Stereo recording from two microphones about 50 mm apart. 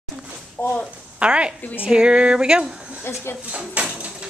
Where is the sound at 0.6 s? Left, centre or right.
Left.